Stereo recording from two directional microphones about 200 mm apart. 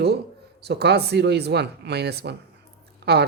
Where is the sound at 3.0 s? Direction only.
55° right (ahead or behind).